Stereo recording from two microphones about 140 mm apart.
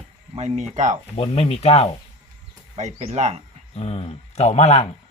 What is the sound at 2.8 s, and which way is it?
Speech, 55° right (ahead or behind).